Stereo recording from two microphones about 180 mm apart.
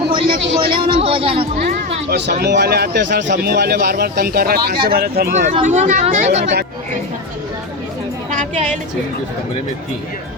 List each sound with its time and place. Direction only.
0.1 s a sound: 30° right (ahead or behind)
0.6 s speech: 30° right (ahead or behind)
2.0 s speech: 65° right (ahead or behind)
5.6 s speech: 40° right (ahead or behind)
8.3 s music: 40° right (ahead or behind)